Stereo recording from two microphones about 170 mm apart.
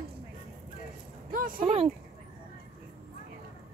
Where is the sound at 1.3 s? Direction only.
55° right (ahead or behind).